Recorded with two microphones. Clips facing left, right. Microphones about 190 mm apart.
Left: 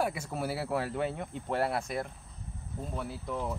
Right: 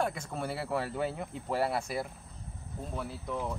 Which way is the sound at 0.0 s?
5° left (ahead or behind).